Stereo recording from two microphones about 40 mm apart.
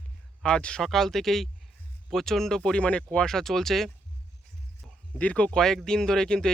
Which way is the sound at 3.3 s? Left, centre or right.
Centre.